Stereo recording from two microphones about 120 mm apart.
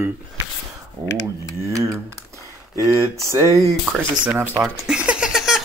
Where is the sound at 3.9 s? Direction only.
Centre (ahead or behind).